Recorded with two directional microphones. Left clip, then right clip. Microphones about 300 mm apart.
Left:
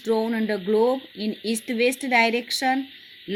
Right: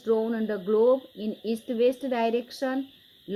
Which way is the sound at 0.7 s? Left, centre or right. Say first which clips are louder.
Right 1 dB; left.